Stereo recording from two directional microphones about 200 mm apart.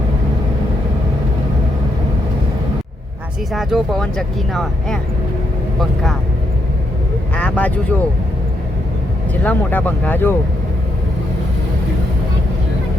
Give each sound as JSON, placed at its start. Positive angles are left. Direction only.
{"t": 3.5, "sound": "speech", "side_deg": 0}
{"t": 7.3, "sound": "speech", "side_deg": 5}
{"t": 9.4, "sound": "speech", "side_deg": 10}